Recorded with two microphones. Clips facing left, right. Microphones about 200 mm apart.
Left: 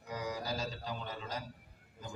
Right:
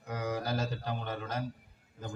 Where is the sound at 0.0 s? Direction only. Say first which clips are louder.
Right 4 dB; 55° right (ahead or behind).